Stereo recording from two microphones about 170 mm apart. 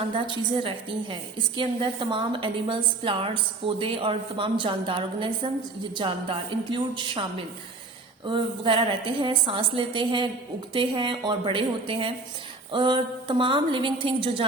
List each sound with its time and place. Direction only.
0.1 s a woman's voice: 30° right (ahead or behind)